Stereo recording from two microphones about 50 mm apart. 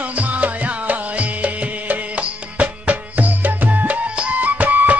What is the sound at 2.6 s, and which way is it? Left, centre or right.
Music, right.